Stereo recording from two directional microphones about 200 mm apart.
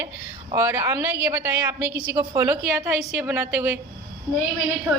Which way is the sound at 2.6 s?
Centre (ahead or behind).